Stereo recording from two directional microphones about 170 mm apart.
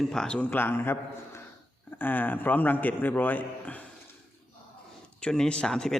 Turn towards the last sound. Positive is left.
turn(degrees=5)  # may be behind; listen again after turning